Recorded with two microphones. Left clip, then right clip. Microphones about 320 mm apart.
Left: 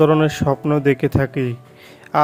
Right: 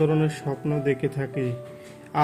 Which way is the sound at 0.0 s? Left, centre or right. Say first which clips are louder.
Left 9 dB; left.